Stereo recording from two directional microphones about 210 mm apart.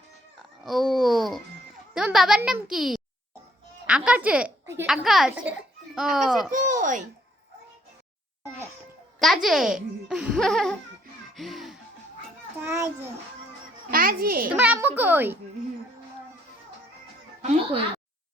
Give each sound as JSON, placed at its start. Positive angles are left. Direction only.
{"t": 0.6, "sound": "a child's voice", "side_deg": 0}
{"t": 6.5, "sound": "speech", "side_deg": -40}
{"t": 9.1, "sound": "a child's voice", "side_deg": 0}
{"t": 11.3, "sound": "music", "side_deg": 0}
{"t": 12.6, "sound": "a child's voice", "side_deg": -10}
{"t": 13.9, "sound": "a child's voice", "side_deg": -45}
{"t": 14.5, "sound": "a child's voice", "side_deg": -10}